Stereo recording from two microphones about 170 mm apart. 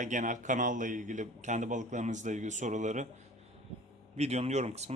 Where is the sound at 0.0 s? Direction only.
50° right (ahead or behind).